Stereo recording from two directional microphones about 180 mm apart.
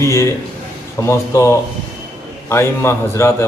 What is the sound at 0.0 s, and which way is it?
A man's voice, 15° left (ahead or behind).